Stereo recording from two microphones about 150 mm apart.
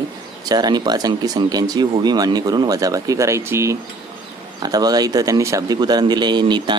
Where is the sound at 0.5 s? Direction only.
25° right (ahead or behind).